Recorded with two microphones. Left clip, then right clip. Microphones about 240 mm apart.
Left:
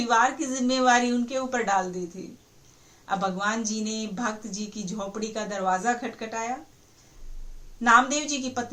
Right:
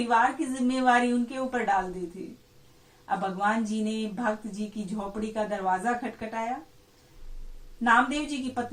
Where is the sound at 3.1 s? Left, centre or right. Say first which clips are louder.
Even; left.